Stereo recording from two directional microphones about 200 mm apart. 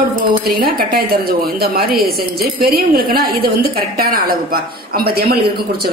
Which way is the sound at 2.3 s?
50° right (ahead or behind).